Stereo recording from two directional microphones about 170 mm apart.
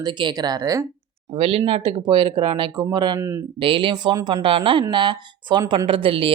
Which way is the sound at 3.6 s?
30° right (ahead or behind).